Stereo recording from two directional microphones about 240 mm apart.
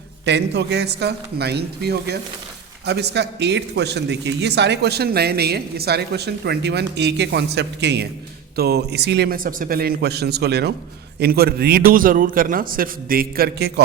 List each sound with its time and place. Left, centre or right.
0.3 s a man's voice: right